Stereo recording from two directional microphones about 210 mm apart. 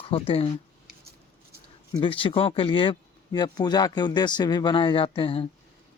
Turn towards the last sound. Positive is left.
turn(degrees=25)  # may be behind; listen again after turning